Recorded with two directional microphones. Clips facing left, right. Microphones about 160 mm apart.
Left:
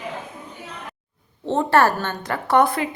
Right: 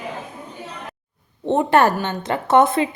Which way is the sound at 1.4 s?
15° right (ahead or behind).